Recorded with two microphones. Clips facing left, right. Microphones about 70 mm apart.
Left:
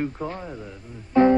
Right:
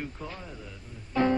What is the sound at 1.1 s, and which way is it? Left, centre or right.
Music, left.